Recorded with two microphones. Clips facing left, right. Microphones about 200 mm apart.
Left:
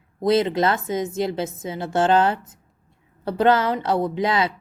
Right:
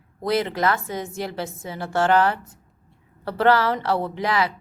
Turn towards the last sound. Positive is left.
turn(degrees=20)  # may be behind; listen again after turning